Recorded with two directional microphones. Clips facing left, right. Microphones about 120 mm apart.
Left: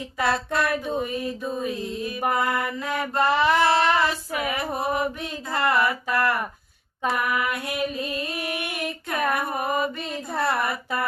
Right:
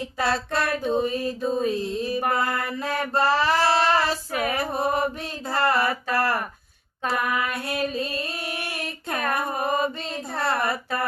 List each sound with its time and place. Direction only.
0.2 s mantra: 30° right (ahead or behind)
2.6 s female singing: 30° right (ahead or behind)
7.9 s a sound: 30° right (ahead or behind)
9.3 s mantra: 30° right (ahead or behind)